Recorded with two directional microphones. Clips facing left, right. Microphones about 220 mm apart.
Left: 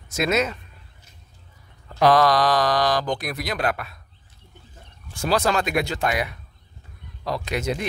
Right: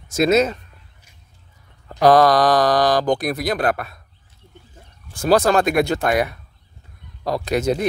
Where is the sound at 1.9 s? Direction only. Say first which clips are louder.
Right 4 dB; 40° right (ahead or behind).